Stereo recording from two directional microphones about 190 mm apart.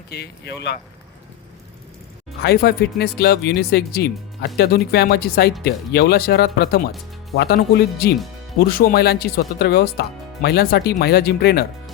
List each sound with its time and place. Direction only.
0.1 s speech: 60° left (ahead or behind)
2.4 s speech: 55° left (ahead or behind)